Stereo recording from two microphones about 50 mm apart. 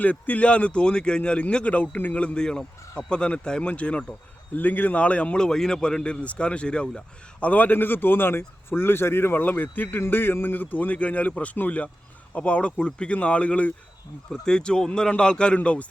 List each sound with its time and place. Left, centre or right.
0.0 s a man's voice: left
2.2 s a man's voice: centre
4.5 s a man's voice: left
5.5 s a man's voice: centre; by 13.7 s left
14.4 s a man's voice: centre